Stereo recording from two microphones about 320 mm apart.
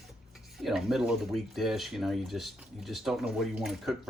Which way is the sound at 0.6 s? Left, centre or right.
Centre.